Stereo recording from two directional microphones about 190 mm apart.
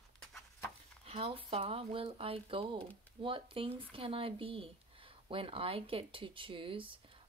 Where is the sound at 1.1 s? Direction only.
30° right (ahead or behind).